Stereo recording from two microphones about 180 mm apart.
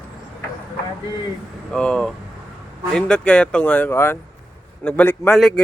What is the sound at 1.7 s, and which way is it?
A man's voice, 5° left (ahead or behind).